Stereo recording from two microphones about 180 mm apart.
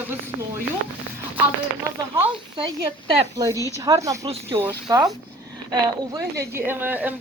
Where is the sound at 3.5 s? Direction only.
15° left (ahead or behind).